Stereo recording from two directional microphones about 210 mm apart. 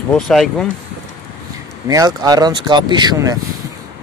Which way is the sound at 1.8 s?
15° right (ahead or behind).